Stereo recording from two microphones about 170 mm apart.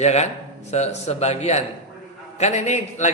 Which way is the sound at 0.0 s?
40° left (ahead or behind).